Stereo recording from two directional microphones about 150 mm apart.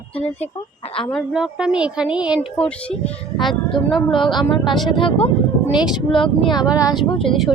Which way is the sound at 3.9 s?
30° left (ahead or behind).